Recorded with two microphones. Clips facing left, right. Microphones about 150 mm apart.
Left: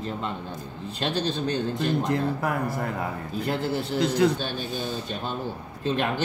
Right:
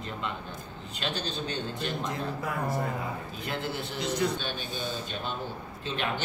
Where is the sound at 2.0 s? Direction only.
75° left (ahead or behind).